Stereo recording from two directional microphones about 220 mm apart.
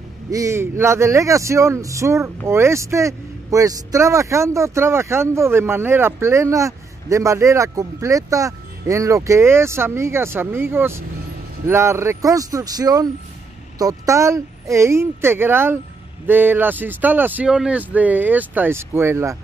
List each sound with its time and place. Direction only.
0.3 s speech: 15° right (ahead or behind)